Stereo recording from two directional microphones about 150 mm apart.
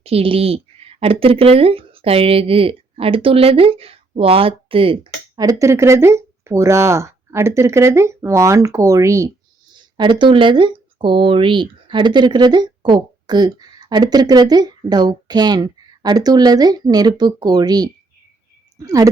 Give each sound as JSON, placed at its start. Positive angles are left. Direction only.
{"t": 0.0, "sound": "a woman's voice", "side_deg": -40}
{"t": 5.4, "sound": "speech", "side_deg": -20}
{"t": 10.0, "sound": "speech", "side_deg": -30}